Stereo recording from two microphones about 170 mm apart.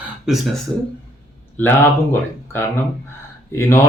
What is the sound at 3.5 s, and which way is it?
Speech, 15° left (ahead or behind).